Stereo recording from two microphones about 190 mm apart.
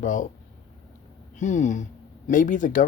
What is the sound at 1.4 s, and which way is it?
Speech, 40° left (ahead or behind).